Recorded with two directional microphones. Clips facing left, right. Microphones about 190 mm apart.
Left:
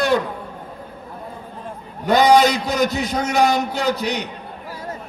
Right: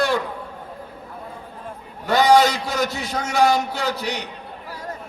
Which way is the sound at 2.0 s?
20° left (ahead or behind).